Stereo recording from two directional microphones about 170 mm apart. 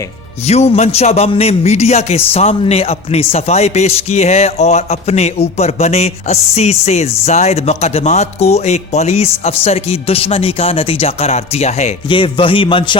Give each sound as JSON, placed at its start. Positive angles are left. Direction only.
{"t": 0.4, "sound": "a man's voice", "side_deg": 40}
{"t": 12.0, "sound": "a man's voice", "side_deg": 30}